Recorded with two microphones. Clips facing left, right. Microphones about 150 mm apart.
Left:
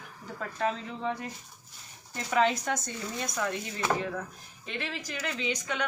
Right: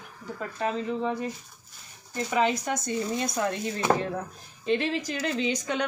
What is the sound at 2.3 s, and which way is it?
Speech, 5° right (ahead or behind).